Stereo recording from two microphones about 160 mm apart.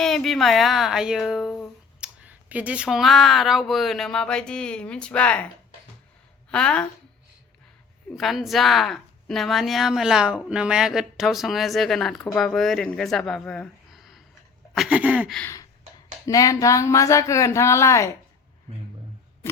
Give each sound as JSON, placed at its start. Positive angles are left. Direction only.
{"t": 0.0, "sound": "a woman's voice", "side_deg": 0}
{"t": 6.5, "sound": "a woman's voice", "side_deg": 5}
{"t": 8.1, "sound": "a woman's voice", "side_deg": 0}
{"t": 14.8, "sound": "a sound", "side_deg": -5}
{"t": 15.4, "sound": "a sound", "side_deg": 15}
{"t": 16.2, "sound": "speech", "side_deg": 20}